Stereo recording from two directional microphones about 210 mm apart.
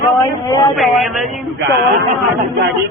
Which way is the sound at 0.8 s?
Centre (ahead or behind).